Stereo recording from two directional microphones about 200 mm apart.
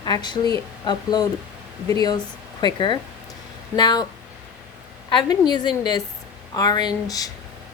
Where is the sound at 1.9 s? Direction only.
20° left (ahead or behind).